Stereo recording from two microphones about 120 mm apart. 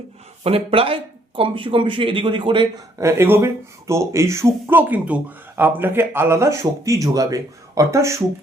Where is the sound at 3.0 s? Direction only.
25° right (ahead or behind).